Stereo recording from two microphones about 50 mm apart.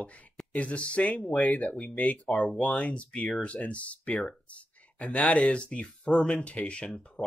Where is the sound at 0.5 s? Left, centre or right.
Left.